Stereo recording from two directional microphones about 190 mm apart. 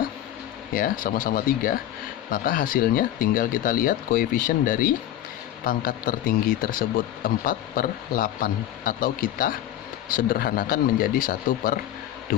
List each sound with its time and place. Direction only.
0.7 s speech: 50° left (ahead or behind)